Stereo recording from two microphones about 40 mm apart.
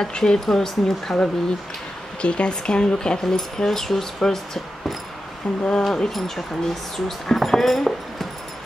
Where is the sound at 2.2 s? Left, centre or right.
Left; by 4.4 s centre.